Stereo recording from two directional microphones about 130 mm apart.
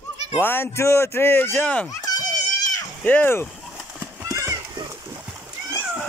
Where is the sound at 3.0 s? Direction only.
15° left (ahead or behind).